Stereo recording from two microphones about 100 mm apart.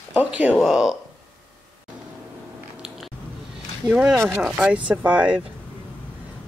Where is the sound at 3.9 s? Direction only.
15° right (ahead or behind).